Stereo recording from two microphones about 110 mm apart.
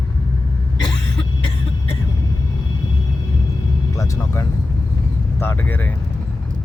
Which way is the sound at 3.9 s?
30° left (ahead or behind).